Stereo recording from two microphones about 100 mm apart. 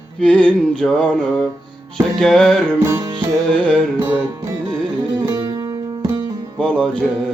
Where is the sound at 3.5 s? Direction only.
10° left (ahead or behind).